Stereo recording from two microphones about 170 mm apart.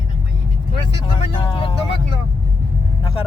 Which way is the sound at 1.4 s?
30° left (ahead or behind).